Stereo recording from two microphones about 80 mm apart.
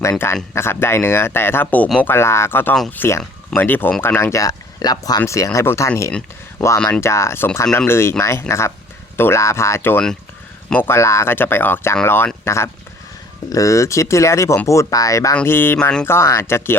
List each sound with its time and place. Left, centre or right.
0.0 s speech: left
5.2 s speech: left
6.6 s speech: centre
7.0 s speech: left
15.4 s speech: left